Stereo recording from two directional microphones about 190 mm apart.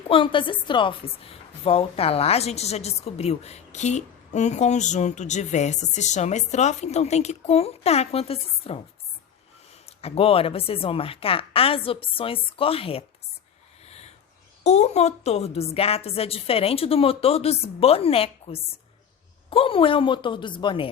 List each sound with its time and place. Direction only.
0.1 s a woman's voice: 25° left (ahead or behind)
10.0 s a woman's voice: 30° left (ahead or behind)
13.8 s a sound: 35° left (ahead or behind)
14.6 s a woman's voice: 35° left (ahead or behind)